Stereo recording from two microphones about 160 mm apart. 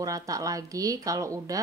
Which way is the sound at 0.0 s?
20° right (ahead or behind).